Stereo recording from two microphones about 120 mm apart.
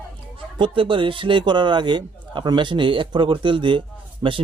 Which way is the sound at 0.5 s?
45° right (ahead or behind).